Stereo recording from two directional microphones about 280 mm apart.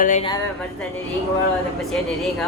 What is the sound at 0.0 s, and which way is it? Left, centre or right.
Speech, left.